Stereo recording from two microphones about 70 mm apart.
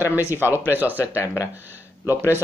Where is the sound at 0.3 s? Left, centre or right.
Right.